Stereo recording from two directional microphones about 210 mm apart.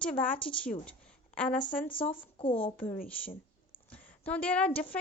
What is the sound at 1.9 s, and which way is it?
Speech, 25° left (ahead or behind).